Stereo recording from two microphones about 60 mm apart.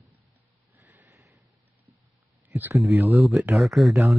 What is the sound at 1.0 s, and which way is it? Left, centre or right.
Sniff, right.